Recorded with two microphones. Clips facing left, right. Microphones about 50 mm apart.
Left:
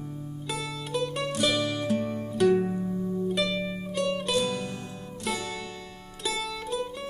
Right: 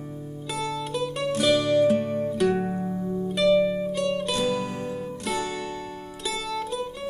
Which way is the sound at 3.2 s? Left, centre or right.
Centre.